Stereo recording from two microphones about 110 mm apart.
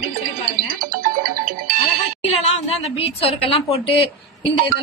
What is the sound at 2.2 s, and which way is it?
A woman's voice, 70° left (ahead or behind).